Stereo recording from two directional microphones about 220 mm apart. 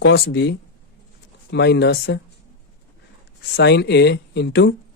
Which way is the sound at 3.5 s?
50° left (ahead or behind).